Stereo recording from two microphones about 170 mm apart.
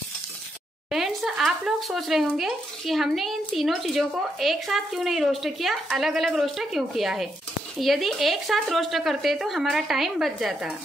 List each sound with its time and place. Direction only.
0.9 s speech: centre (ahead or behind)